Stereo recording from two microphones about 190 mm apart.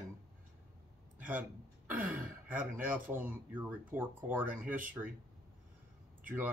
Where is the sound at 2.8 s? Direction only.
10° right (ahead or behind).